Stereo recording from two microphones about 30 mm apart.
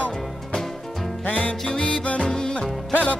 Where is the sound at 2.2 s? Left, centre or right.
Left.